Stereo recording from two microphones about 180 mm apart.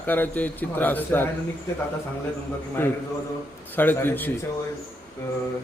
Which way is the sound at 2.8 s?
10° left (ahead or behind).